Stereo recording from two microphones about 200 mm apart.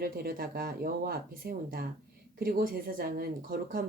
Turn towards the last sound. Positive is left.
turn(degrees=-45)  # may be behind; listen again after turning